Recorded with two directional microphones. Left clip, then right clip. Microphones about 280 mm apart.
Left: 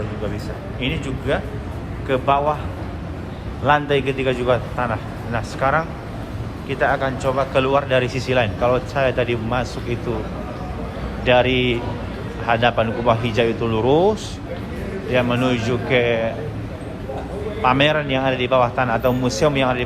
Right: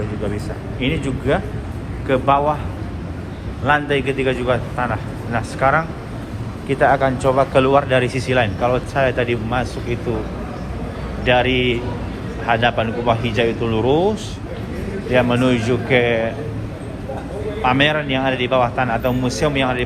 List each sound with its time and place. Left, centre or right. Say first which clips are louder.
0.8 s speech: right 4 dB; centre
3.6 s speech: even; centre
11.3 s speech: even; centre
17.6 s speech: even; centre